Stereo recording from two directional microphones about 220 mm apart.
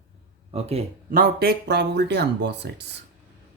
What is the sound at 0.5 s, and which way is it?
Speech, 30° right (ahead or behind).